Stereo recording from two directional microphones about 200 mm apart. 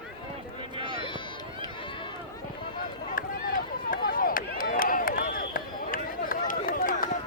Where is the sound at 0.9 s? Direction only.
25° left (ahead or behind).